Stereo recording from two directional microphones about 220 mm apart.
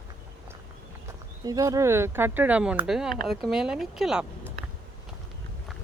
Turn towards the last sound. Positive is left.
turn(degrees=-5)  # may be behind; listen again after turning